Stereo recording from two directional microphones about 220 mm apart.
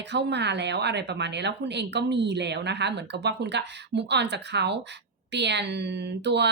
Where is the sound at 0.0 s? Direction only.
50° right (ahead or behind).